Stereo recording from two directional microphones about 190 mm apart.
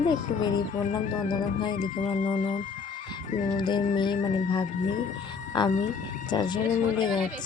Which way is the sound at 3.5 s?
25° left (ahead or behind).